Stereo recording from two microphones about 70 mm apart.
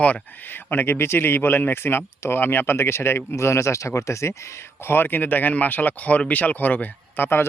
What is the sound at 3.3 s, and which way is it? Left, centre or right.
Speech, left.